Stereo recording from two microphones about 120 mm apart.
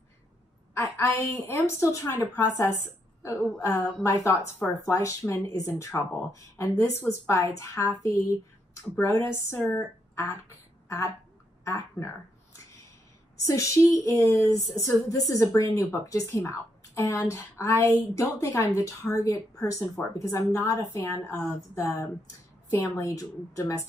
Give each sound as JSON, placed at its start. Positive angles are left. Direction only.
{"t": 0.7, "sound": "a woman's voice", "side_deg": 25}
{"t": 13.5, "sound": "speech", "side_deg": 25}